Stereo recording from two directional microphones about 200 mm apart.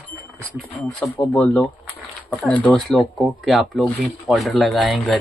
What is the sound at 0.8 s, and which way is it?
Speech, 5° left (ahead or behind).